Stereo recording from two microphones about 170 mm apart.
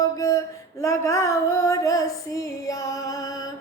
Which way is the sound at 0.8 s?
15° left (ahead or behind).